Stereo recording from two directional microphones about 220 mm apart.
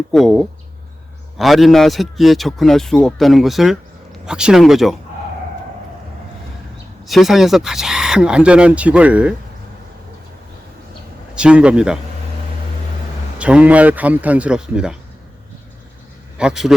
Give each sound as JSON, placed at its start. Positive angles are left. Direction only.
{"t": 0.1, "sound": "speech", "side_deg": 0}
{"t": 7.0, "sound": "speech", "side_deg": 0}
{"t": 11.3, "sound": "speech", "side_deg": -5}
{"t": 13.4, "sound": "speech", "side_deg": -5}
{"t": 16.4, "sound": "speech", "side_deg": -5}